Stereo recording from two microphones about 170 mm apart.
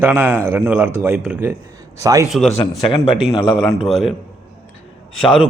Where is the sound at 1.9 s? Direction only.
20° right (ahead or behind).